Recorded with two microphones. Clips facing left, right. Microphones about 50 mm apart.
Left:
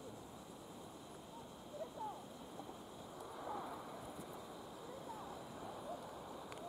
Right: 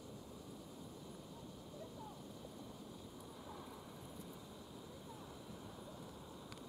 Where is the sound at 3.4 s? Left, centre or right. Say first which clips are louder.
Left 9 dB; left.